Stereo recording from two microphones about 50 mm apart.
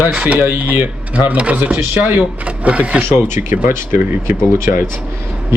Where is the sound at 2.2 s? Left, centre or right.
Right.